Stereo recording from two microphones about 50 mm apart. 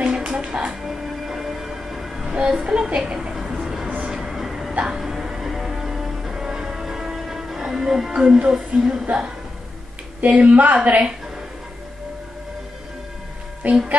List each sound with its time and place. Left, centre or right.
0.0 s music: centre
0.8 s train: centre
2.3 s a woman's voice: centre
3.1 s a sound: centre
4.0 s train: centre
4.8 s music: centre
10.2 s a woman's voice: right
13.6 s speech: right